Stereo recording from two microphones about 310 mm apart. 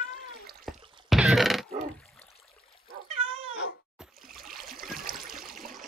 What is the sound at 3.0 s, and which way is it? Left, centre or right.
Cat, right.